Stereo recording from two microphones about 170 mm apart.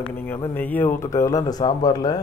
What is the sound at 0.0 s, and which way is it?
Speech, 10° left (ahead or behind).